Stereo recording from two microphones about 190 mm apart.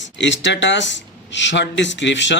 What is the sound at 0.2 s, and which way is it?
Speech, 70° left (ahead or behind).